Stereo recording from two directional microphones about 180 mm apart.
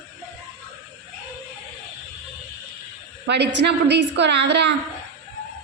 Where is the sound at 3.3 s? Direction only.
70° right (ahead or behind).